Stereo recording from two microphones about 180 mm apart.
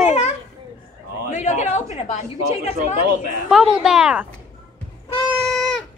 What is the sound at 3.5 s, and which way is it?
Speech, centre (ahead or behind).